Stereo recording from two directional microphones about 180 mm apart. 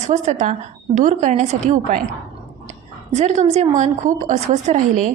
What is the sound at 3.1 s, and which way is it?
A woman's voice, 40° right (ahead or behind).